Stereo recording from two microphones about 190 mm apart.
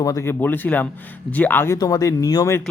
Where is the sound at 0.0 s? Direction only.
15° left (ahead or behind).